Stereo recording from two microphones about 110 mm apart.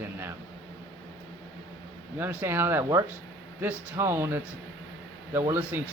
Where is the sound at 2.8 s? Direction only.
35° right (ahead or behind).